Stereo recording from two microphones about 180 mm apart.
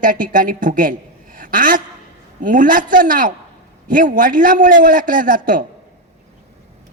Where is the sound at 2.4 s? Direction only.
50° right (ahead or behind).